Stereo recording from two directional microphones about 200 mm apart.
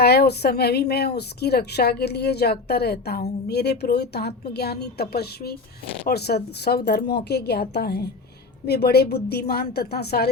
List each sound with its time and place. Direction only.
0.0 s a woman's voice: 55° left (ahead or behind)